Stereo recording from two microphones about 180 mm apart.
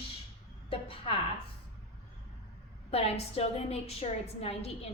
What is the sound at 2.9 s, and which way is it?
A woman's voice, 35° left (ahead or behind).